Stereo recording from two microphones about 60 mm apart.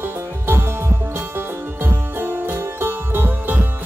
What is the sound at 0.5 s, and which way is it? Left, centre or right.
Music, right.